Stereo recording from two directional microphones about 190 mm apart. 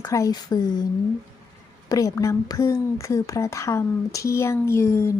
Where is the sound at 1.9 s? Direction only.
15° left (ahead or behind).